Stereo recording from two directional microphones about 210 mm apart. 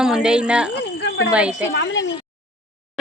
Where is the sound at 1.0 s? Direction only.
55° left (ahead or behind).